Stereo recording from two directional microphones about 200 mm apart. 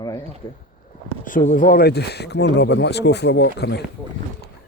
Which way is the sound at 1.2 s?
40° left (ahead or behind).